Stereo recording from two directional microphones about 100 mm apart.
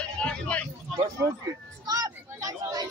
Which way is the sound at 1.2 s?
35° right (ahead or behind).